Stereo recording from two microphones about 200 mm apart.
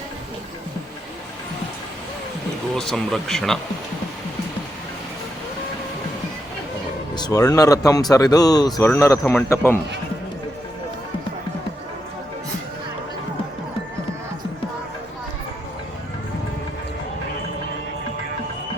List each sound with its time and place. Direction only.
2.7 s speech: centre (ahead or behind)
7.2 s speech: 20° left (ahead or behind)